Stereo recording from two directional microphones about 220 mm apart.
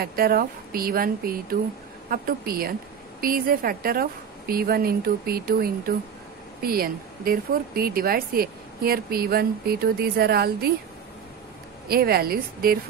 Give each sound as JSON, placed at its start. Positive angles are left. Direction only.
{"t": 0.0, "sound": "speech", "side_deg": -40}
{"t": 11.9, "sound": "speech", "side_deg": -45}